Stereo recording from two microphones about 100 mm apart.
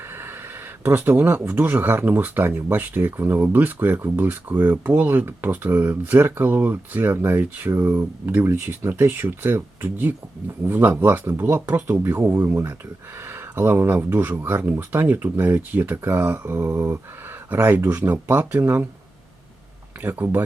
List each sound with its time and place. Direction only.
0.1 s a sound: 20° right (ahead or behind)
0.9 s speech: 20° right (ahead or behind)
20.0 s speech: 20° right (ahead or behind)